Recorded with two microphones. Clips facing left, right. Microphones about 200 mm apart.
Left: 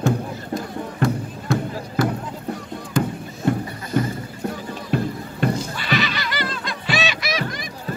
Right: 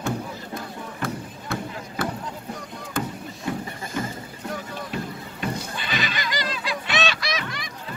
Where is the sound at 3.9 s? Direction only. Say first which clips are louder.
Left 8 dB; 50° left (ahead or behind).